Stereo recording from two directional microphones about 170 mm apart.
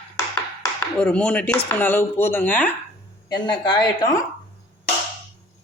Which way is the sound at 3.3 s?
25° left (ahead or behind).